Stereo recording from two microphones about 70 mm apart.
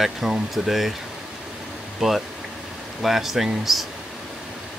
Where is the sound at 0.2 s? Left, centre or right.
Centre.